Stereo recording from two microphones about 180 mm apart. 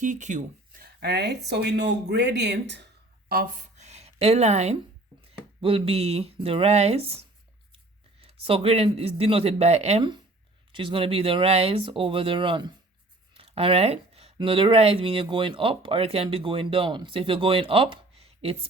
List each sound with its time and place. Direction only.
0.0 s speech: 45° right (ahead or behind); by 2.8 s 70° right (ahead or behind)
3.2 s speech: 55° right (ahead or behind)
3.8 s a sound: 40° right (ahead or behind)
5.3 s speech: 30° right (ahead or behind)